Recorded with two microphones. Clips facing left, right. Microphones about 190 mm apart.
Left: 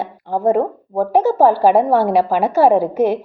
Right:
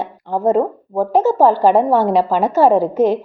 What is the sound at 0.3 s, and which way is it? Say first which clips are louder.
A woman's voice: right 1 dB; 15° left (ahead or behind).